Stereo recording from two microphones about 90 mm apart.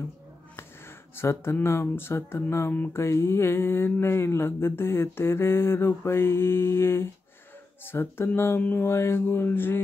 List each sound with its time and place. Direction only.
0.6 s speech: 30° left (ahead or behind)
2.7 s mantra: 25° left (ahead or behind)